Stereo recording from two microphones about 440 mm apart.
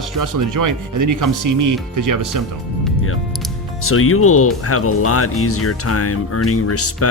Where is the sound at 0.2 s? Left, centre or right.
Right.